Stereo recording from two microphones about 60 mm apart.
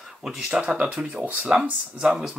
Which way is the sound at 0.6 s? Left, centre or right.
Right.